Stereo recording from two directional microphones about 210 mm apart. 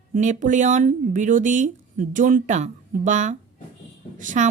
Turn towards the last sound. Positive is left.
turn(degrees=-35)  # may be behind; listen again after turning